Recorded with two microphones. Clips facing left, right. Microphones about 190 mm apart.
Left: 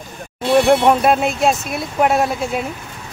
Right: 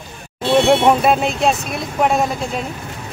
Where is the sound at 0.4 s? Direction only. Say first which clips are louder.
Even; 25° right (ahead or behind).